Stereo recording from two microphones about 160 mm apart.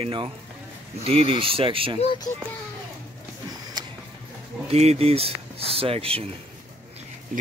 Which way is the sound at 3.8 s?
25° right (ahead or behind).